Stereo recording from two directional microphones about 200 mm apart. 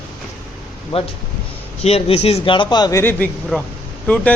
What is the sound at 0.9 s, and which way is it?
A man's voice, 30° left (ahead or behind).